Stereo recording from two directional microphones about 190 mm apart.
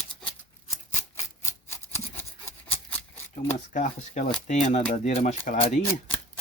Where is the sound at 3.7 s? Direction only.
40° left (ahead or behind).